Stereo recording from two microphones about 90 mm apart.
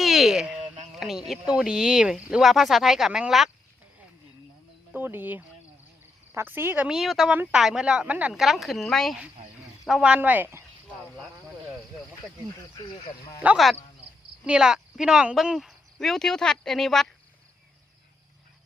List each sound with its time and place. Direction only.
0.0 s speech: centre (ahead or behind)
4.9 s speech: 20° right (ahead or behind)
6.8 s speech: 5° right (ahead or behind)
7.3 s speech: 20° right (ahead or behind)
7.5 s speech: 5° right (ahead or behind)
8.3 s speech: 5° right (ahead or behind)
9.8 s speech: 10° right (ahead or behind)
10.2 s speech: 20° right (ahead or behind)
12.7 s speech: 60° left (ahead or behind)
13.4 s speech: 15° right (ahead or behind); by 17.1 s 5° left (ahead or behind)